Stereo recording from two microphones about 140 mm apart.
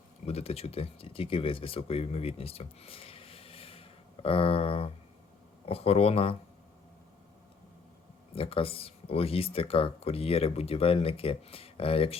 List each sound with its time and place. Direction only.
0.3 s speech: 45° left (ahead or behind)
8.4 s speech: 40° left (ahead or behind)